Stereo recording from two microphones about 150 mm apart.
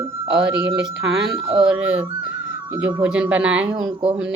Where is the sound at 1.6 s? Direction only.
10° right (ahead or behind).